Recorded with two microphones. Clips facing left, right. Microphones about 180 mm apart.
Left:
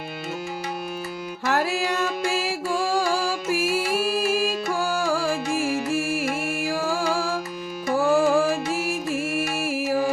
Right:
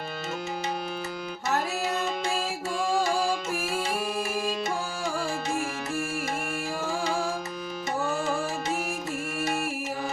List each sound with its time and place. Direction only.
1.5 s music: 90° left